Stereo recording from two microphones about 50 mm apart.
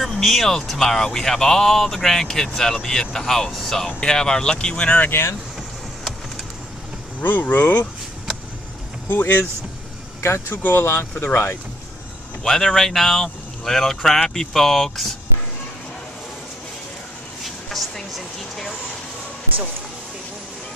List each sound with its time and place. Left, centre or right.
0.0 s speech: centre
5.6 s vehicle: centre
7.2 s speech: left
9.1 s speech: left
10.2 s speech: left
10.6 s speech: left
12.4 s speech: centre
17.6 s a sound: centre